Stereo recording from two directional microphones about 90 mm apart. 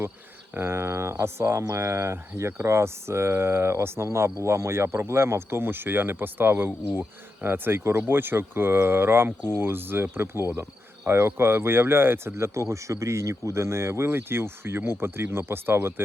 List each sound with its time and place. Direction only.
0.5 s speech: 25° right (ahead or behind)